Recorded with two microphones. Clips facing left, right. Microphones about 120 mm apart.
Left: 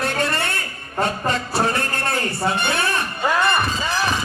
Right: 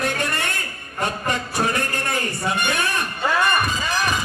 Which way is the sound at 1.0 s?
15° right (ahead or behind).